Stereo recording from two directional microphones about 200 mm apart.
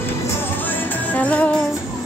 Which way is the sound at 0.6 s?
10° left (ahead or behind).